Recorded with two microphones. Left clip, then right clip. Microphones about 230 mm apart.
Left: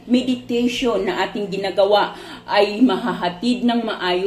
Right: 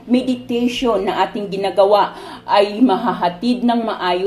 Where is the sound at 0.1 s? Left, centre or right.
Right.